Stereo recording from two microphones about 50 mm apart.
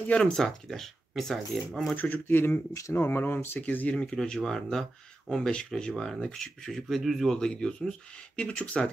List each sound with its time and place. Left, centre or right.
0.0 s speech: left
0.3 s speech: centre
2.0 s a man's voice: left
2.3 s speech: left
3.6 s speech: left
4.1 s speech: centre
8.4 s speech: left